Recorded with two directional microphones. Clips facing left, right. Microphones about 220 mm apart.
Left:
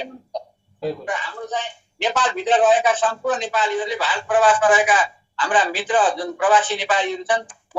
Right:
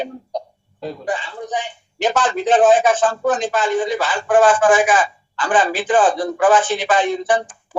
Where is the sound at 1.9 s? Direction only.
50° right (ahead or behind).